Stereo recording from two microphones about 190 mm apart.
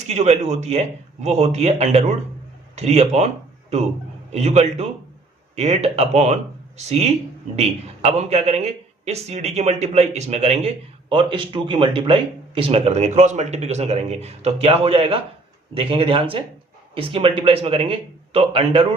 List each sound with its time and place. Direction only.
0.1 s a man's voice: 35° right (ahead or behind)